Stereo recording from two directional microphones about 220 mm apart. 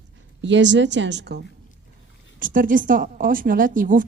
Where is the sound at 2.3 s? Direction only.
40° right (ahead or behind).